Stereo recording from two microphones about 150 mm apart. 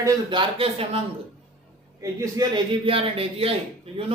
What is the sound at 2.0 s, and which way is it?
Speech, 20° right (ahead or behind).